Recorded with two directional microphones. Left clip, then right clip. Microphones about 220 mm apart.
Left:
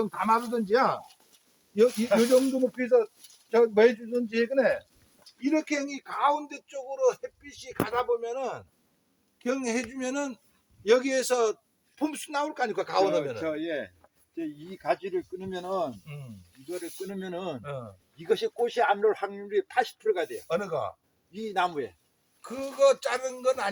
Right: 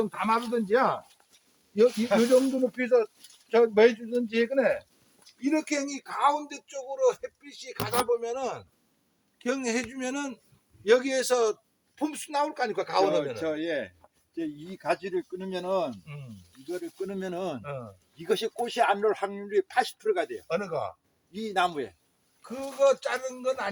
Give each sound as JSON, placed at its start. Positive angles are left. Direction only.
{"t": 0.0, "sound": "a man's voice", "side_deg": 15}
{"t": 13.4, "sound": "speech", "side_deg": -50}
{"t": 16.1, "sound": "a man's voice", "side_deg": 10}
{"t": 16.6, "sound": "speech", "side_deg": -50}
{"t": 17.6, "sound": "a man's voice", "side_deg": 15}
{"t": 18.2, "sound": "speech", "side_deg": -50}
{"t": 20.5, "sound": "a man's voice", "side_deg": 15}
{"t": 21.3, "sound": "speech", "side_deg": -45}
{"t": 22.4, "sound": "speech", "side_deg": 45}